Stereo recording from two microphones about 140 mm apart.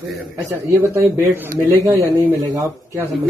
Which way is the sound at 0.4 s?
20° right (ahead or behind).